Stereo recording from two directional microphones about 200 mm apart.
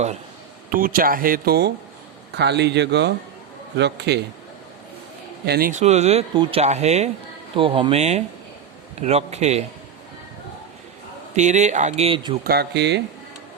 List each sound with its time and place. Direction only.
0.7 s speech: 45° right (ahead or behind)
5.5 s speech: 45° right (ahead or behind)
11.3 s speech: 35° right (ahead or behind)
12.5 s speech: 55° right (ahead or behind)